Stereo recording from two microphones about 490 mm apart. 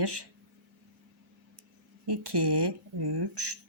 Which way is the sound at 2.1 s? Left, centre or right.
Right.